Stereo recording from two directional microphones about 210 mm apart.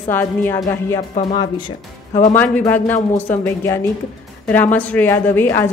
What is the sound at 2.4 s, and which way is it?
Speech, 10° left (ahead or behind).